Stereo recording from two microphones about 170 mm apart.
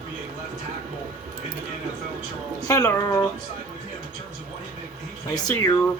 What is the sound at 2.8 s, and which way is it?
Speech, 15° left (ahead or behind).